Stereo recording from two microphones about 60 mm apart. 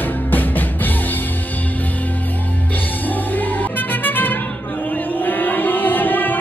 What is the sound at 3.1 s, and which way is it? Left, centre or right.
Music, left.